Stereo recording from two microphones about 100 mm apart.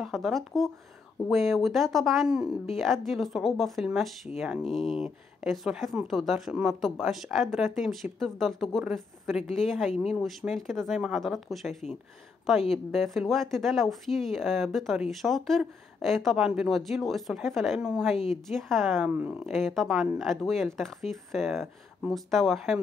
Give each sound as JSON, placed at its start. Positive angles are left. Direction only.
{"t": 0.0, "sound": "a woman's voice", "side_deg": 0}
{"t": 19.0, "sound": "speech", "side_deg": -15}
{"t": 19.4, "sound": "a woman's voice", "side_deg": 0}